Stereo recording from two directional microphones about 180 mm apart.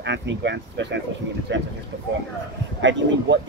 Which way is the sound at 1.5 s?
85° right.